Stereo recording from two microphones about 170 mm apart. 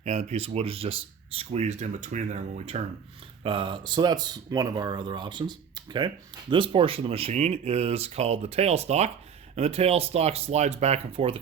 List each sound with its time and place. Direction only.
0.0 s speech: 40° right (ahead or behind)
3.4 s speech: 30° right (ahead or behind)